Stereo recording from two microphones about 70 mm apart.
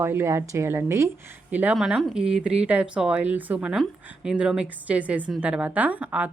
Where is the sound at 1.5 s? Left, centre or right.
Right.